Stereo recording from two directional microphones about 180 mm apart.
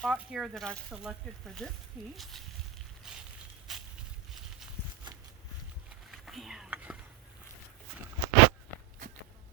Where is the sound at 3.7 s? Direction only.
Centre (ahead or behind).